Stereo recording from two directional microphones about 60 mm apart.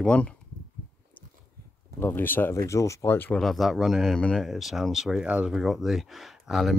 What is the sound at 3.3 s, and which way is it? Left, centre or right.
Speech, centre.